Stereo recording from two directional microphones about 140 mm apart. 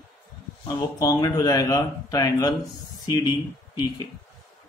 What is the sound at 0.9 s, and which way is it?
Speech, 25° left (ahead or behind).